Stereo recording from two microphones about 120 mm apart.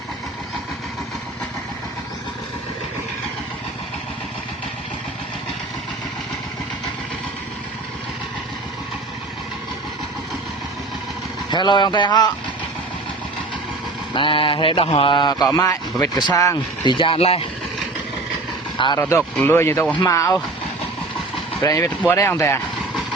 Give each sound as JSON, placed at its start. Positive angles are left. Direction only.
{"t": 11.5, "sound": "a man's voice", "side_deg": 40}
{"t": 14.1, "sound": "speech", "side_deg": 45}
{"t": 15.4, "sound": "a man's voice", "side_deg": 25}
{"t": 16.8, "sound": "speech", "side_deg": 45}
{"t": 18.9, "sound": "a man's voice", "side_deg": 25}
{"t": 21.6, "sound": "a man's voice", "side_deg": 25}